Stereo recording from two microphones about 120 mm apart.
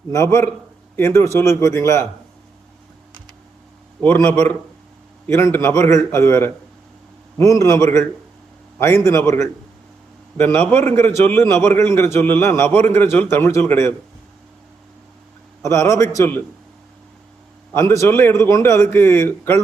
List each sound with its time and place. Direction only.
0.1 s a man's voice: 25° left (ahead or behind)
4.0 s a man's voice: 20° left (ahead or behind)
15.6 s a man's voice: 25° left (ahead or behind)
17.7 s a man's voice: 20° left (ahead or behind)